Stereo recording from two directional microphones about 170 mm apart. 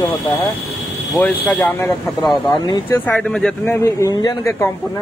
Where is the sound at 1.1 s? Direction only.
5° left (ahead or behind).